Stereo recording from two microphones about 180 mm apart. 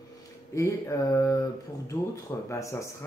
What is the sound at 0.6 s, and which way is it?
Speech, 15° left (ahead or behind).